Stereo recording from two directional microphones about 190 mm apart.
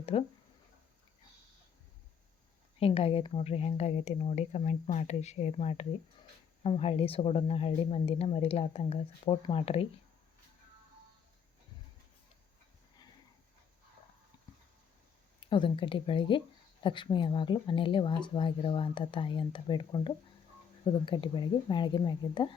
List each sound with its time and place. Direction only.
0.0 s speech: 30° left (ahead or behind)
2.7 s speech: 30° left (ahead or behind)
14.3 s a sound: 20° left (ahead or behind)
15.4 s speech: 25° left (ahead or behind)